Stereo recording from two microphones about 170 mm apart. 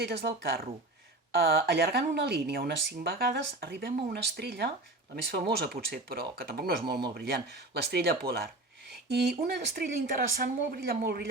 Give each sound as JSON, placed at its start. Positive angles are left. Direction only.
{"t": 0.0, "sound": "speech", "side_deg": -90}
{"t": 1.3, "sound": "speech", "side_deg": -65}